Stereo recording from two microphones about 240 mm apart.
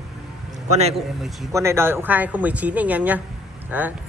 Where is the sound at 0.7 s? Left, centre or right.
Right.